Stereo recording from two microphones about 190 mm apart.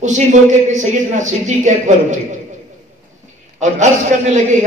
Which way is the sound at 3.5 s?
40° right (ahead or behind).